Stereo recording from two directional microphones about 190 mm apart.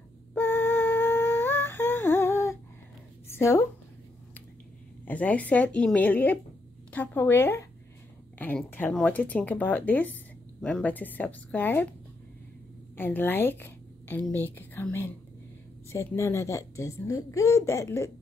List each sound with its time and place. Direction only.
0.3 s humming: 10° left (ahead or behind)
3.3 s speech: 15° left (ahead or behind)
5.0 s speech: 5° left (ahead or behind)
12.9 s speech: 10° left (ahead or behind)